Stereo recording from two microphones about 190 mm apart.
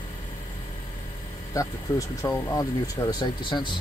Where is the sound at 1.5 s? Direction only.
15° left (ahead or behind).